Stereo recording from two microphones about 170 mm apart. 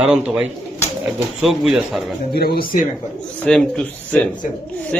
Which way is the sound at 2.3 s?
70° left (ahead or behind).